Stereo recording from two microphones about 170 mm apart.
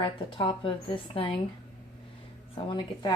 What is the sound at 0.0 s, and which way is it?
A woman's voice, 30° left (ahead or behind).